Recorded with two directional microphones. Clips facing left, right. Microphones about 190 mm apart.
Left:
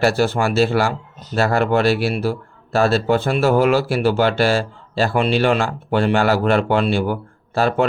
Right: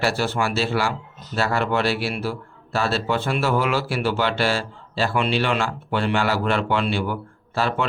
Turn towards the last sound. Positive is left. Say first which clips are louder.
# left 6 dB
turn(degrees=45)  # may be behind; listen again after turning